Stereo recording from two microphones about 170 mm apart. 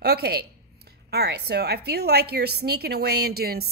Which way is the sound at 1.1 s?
70° right (ahead or behind).